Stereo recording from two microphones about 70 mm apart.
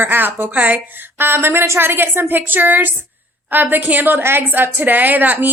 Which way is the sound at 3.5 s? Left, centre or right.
Right.